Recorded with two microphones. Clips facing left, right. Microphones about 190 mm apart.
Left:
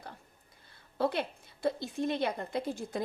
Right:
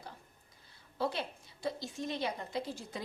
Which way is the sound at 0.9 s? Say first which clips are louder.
Left 5 dB; 55° left (ahead or behind).